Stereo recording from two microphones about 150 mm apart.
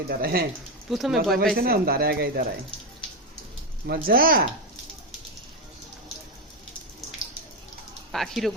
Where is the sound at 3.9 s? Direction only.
80° right.